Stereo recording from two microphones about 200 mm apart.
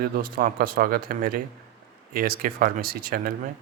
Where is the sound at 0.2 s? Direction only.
45° right (ahead or behind).